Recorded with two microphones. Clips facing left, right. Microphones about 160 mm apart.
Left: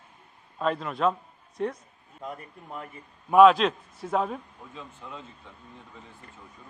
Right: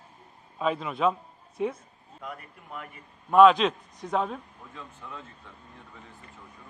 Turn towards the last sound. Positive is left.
turn(degrees=15)  # may be behind; listen again after turning